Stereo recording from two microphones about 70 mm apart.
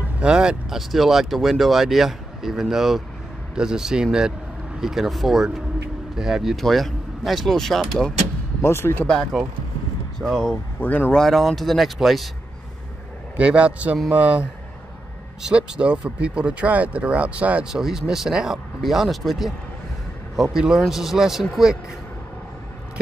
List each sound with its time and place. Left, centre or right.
0.2 s speech: centre
8.6 s speech: left
9.3 s speech: centre
10.8 s speech: left
11.1 s speech: centre
13.4 s speech: centre
15.4 s speech: centre
17.7 s speech: centre
20.5 s speech: centre